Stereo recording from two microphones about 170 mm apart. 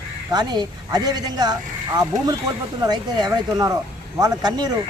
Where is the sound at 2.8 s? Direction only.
25° right (ahead or behind).